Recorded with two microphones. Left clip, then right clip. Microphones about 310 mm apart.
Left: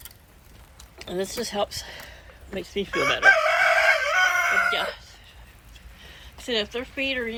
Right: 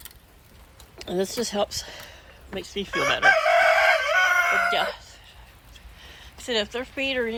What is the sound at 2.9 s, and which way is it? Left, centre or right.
Chicken, right.